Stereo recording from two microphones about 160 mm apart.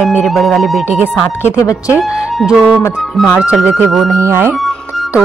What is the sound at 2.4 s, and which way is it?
Speech, centre (ahead or behind).